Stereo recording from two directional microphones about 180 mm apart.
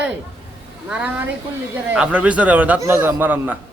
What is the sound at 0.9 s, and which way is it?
A man's voice, 5° right (ahead or behind).